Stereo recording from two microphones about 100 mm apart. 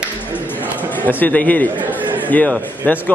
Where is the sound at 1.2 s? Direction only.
15° left (ahead or behind).